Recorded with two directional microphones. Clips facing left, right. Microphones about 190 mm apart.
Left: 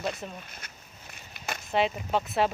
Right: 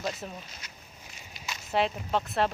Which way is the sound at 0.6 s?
55° left (ahead or behind).